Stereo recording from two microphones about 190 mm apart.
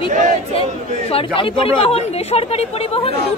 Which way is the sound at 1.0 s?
30° left (ahead or behind).